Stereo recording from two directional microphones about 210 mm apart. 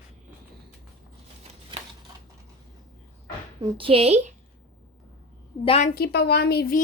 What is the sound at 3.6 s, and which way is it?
Speech, 25° right (ahead or behind).